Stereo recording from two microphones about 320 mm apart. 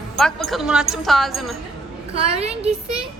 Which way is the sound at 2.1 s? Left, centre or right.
Centre.